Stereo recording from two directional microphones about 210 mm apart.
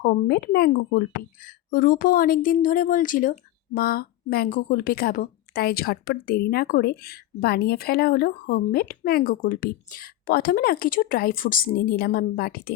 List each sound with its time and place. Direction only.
0.0 s a woman's voice: 45° left (ahead or behind)